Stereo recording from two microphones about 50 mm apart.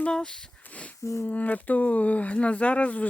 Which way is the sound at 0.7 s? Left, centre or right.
Left.